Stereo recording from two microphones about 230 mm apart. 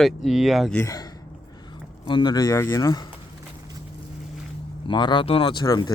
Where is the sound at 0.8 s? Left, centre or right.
Centre.